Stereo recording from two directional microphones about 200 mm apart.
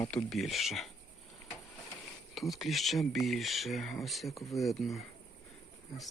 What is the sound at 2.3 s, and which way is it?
Speech, centre (ahead or behind).